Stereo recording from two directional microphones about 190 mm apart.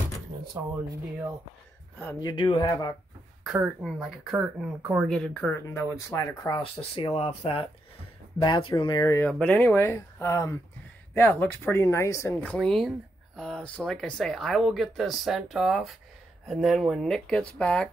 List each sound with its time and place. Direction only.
2.2 s speech: 25° left (ahead or behind)
3.4 s speech: 5° right (ahead or behind)
5.0 s speech: 5° left (ahead or behind)
9.3 s speech: 5° left (ahead or behind)